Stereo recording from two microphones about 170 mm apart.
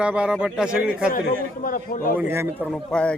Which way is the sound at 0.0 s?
5° right (ahead or behind).